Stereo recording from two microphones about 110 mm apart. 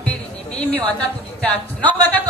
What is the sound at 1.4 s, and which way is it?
Speech, 15° left (ahead or behind).